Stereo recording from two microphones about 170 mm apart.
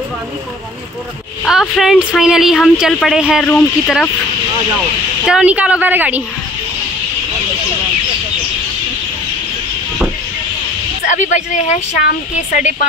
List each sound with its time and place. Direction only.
1.4 s a woman's voice: centre (ahead or behind)
5.2 s a woman's voice: 5° right (ahead or behind)
11.1 s speech: 45° left (ahead or behind)